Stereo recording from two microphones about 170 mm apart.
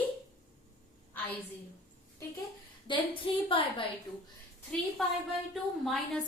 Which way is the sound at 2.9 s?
25° left (ahead or behind).